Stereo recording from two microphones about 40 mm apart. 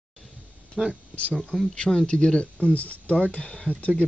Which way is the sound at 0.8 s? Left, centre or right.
Centre.